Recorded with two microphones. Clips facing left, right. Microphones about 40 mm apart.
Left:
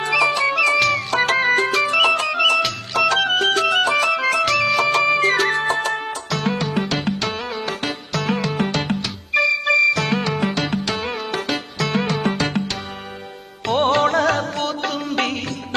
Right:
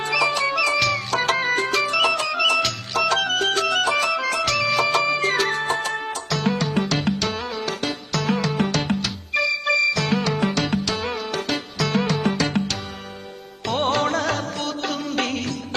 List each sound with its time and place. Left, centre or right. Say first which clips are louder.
0.0 s music: left 3 dB; centre
4.1 s music: left 4 dB; centre
10.2 s music: left 1 dB; left
11.4 s music: left 1 dB; centre
13.7 s music: left 4 dB; centre